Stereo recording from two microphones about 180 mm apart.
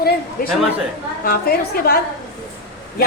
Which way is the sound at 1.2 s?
55° left (ahead or behind).